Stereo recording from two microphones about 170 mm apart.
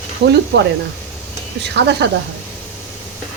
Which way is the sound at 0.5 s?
90° right.